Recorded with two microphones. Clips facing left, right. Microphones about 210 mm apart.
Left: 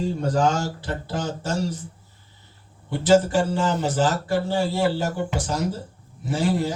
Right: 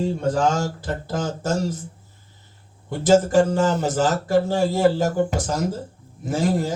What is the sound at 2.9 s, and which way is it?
Speech, 40° right (ahead or behind).